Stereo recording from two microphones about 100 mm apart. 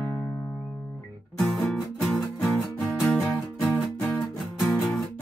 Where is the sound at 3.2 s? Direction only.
20° left (ahead or behind).